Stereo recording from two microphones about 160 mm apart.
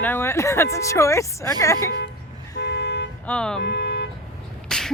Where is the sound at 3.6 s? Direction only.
90° left.